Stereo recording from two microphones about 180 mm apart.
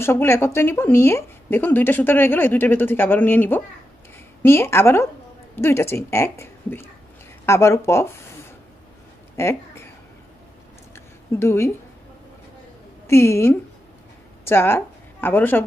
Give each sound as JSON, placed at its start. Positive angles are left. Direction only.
{"t": 0.0, "sound": "speech", "side_deg": 15}
{"t": 9.4, "sound": "speech", "side_deg": 15}
{"t": 11.3, "sound": "speech", "side_deg": 15}
{"t": 13.0, "sound": "a woman's voice", "side_deg": 15}